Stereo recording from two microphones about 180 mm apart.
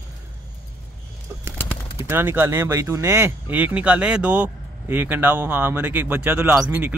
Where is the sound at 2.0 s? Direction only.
15° right (ahead or behind).